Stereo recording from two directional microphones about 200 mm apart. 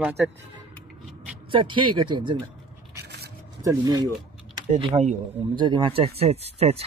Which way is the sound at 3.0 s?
55° right (ahead or behind).